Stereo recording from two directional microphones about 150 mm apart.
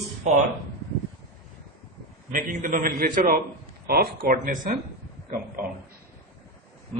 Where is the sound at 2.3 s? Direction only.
65° right (ahead or behind).